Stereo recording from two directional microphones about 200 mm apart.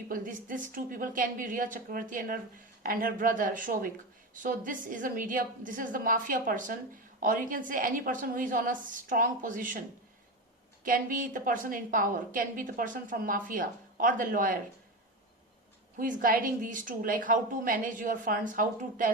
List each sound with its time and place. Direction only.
0.1 s a woman's voice: 45° right (ahead or behind)
10.8 s a woman's voice: 45° right (ahead or behind)
16.0 s a woman's voice: 45° right (ahead or behind)